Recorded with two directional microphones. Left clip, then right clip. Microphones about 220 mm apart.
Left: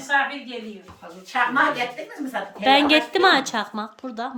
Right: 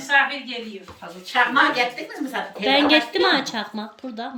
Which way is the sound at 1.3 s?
20° left (ahead or behind).